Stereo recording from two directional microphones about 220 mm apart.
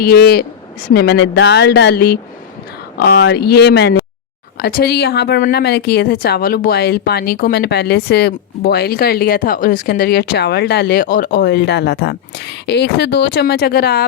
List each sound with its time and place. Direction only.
0.0 s a woman's voice: 45° left (ahead or behind)